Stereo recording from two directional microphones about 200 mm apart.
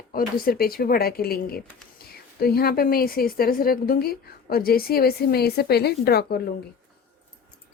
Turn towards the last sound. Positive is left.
turn(degrees=50)  # may be behind; listen again after turning